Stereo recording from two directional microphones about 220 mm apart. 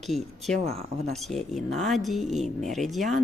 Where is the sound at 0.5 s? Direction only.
30° right (ahead or behind).